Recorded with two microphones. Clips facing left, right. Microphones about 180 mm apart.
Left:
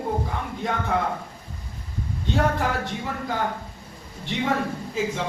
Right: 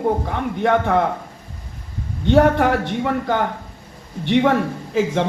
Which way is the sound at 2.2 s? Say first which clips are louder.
Right 10 dB; 70° right (ahead or behind).